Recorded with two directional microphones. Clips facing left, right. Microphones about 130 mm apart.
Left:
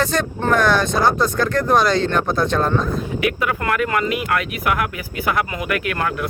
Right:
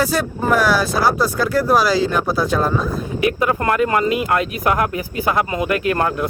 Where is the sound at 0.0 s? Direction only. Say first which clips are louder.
Right 1 dB; 5° right (ahead or behind).